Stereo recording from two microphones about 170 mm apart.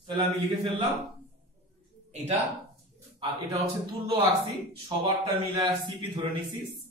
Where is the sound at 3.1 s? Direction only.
30° right (ahead or behind).